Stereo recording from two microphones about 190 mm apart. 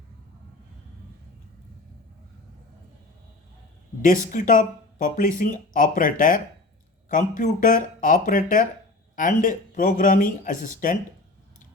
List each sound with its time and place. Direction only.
4.0 s speech: 45° left (ahead or behind)